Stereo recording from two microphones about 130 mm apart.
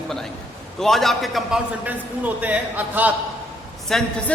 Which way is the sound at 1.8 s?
10° right (ahead or behind).